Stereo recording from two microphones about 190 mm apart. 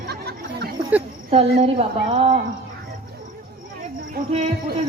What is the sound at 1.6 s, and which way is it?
Speech, 30° right (ahead or behind).